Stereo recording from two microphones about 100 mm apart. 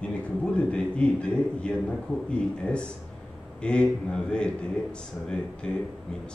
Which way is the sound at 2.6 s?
10° left (ahead or behind).